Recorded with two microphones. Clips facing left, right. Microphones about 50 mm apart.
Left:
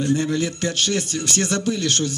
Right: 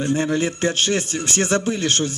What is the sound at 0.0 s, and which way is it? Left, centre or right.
Speech, right.